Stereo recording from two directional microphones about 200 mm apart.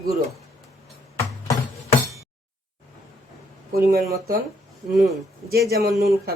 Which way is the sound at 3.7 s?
50° right (ahead or behind).